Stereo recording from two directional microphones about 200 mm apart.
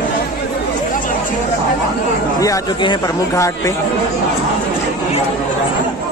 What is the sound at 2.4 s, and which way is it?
Speech, 20° left (ahead or behind).